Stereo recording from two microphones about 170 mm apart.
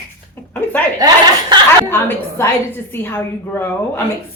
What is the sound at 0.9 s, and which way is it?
Chuckle, 25° right (ahead or behind).